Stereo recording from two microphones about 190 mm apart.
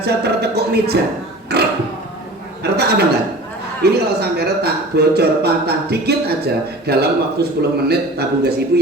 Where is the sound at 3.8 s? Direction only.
55° right (ahead or behind).